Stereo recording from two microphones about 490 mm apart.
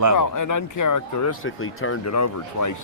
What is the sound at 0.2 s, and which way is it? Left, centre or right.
Speech, left.